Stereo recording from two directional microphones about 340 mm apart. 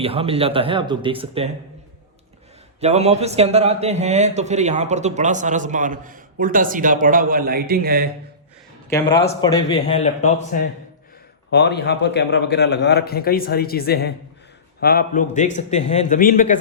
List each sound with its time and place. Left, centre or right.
0.0 s speech: centre
2.8 s a man's voice: centre
8.9 s a man's voice: centre; by 16.6 s left